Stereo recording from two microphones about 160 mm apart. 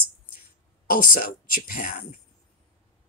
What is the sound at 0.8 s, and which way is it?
Speech, 60° left (ahead or behind).